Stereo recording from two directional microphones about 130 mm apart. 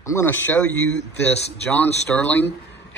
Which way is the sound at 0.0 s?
20° left (ahead or behind).